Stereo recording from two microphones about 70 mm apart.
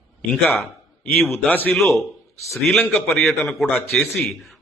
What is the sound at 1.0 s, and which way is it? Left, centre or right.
Speech, centre.